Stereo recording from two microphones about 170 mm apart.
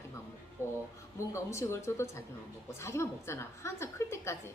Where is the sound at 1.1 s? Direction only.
15° left (ahead or behind).